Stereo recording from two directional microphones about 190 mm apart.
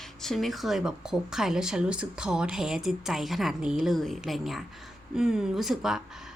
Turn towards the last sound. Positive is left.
turn(degrees=0)  # may be behind; listen again after turning